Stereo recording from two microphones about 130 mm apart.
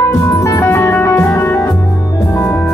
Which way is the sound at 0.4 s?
20° left (ahead or behind).